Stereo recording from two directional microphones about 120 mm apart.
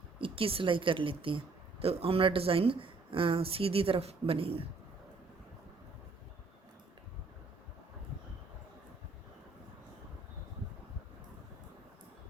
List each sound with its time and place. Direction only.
0.2 s a woman's voice: 50° right (ahead or behind)